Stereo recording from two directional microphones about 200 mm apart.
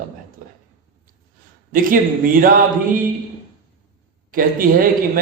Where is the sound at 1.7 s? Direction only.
45° right (ahead or behind).